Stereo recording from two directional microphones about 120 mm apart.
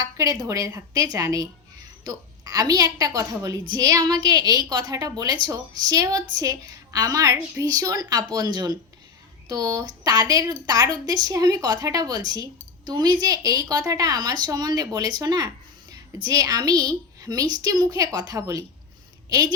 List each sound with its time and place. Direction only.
0.0 s a woman's voice: 30° right (ahead or behind)